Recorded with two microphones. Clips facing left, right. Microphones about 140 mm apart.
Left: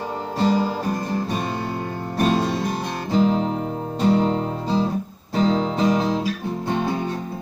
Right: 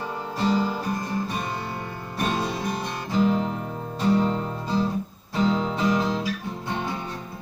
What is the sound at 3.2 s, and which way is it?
Music, 25° left (ahead or behind).